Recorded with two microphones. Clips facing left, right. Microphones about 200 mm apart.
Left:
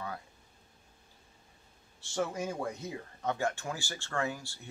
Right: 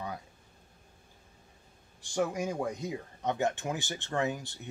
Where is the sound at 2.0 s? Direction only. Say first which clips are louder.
Right 3 dB; 15° right (ahead or behind).